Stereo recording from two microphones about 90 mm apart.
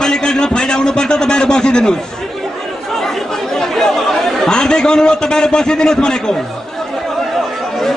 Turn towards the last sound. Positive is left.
turn(degrees=10)  # may be behind; listen again after turning